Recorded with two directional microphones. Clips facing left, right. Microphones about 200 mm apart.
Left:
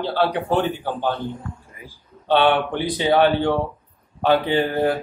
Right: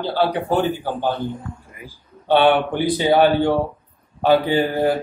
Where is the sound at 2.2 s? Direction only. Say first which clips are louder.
Right 2 dB; 10° right (ahead or behind).